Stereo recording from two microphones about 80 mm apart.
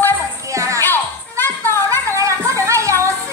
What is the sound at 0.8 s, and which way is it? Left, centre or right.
Music, left.